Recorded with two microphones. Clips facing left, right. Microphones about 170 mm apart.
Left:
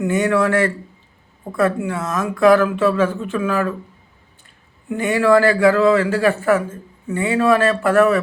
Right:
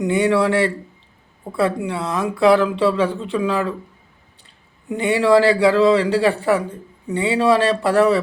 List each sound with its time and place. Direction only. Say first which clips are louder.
0.0 s a man's voice: even; 15° right (ahead or behind)
4.9 s a man's voice: even; 20° right (ahead or behind)